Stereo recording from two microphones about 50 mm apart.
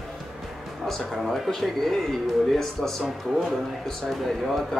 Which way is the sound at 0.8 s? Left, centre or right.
Centre.